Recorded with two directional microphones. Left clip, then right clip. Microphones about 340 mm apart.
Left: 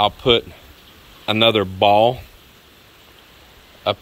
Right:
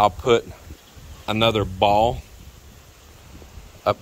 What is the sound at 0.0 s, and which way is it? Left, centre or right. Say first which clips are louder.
Speech: left 1 dB; centre.